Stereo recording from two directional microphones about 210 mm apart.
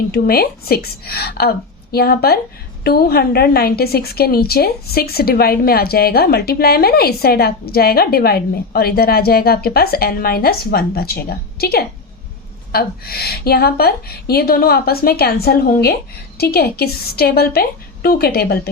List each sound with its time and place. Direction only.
0.1 s a woman's voice: 45° left (ahead or behind)